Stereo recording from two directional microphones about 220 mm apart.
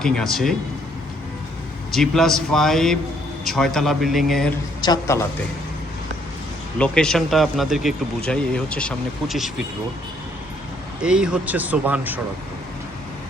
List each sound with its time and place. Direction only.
0.0 s speech: centre (ahead or behind)
1.9 s speech: centre (ahead or behind)
4.8 s a man's voice: 15° left (ahead or behind)
6.7 s speech: 5° left (ahead or behind)
11.0 s speech: 5° right (ahead or behind)